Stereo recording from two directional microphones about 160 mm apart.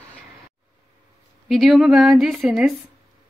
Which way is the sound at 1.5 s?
Centre (ahead or behind).